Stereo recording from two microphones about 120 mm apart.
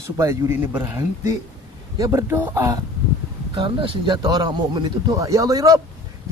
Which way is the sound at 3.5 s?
45° right (ahead or behind).